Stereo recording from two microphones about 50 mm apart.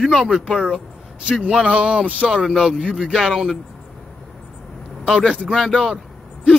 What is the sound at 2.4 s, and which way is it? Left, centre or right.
Speech, centre.